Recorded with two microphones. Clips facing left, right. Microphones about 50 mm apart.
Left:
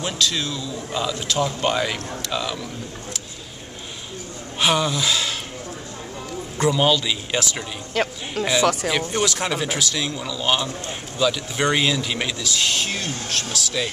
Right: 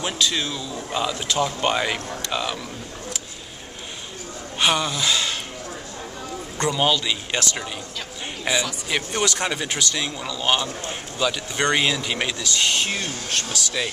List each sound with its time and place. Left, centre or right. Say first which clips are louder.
0.0 s speech: even; centre
4.6 s speech: left 1 dB; centre
6.6 s speech: left 2 dB; centre
7.9 s speech: left 9 dB; left
8.9 s speech: left 1 dB; centre